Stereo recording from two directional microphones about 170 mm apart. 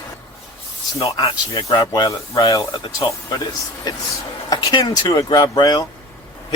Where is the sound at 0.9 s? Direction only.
25° left (ahead or behind).